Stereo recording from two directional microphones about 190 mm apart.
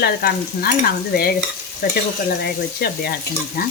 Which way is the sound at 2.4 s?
55° left (ahead or behind).